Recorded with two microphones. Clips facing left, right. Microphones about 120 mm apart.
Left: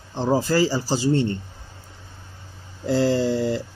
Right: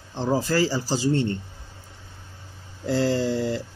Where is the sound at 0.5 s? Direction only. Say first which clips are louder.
Left 2 dB; 15° left (ahead or behind).